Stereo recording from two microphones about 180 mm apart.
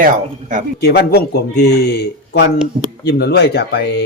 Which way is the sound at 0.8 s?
60° left (ahead or behind).